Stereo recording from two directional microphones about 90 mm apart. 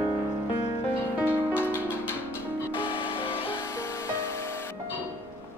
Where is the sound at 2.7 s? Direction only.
75° left (ahead or behind).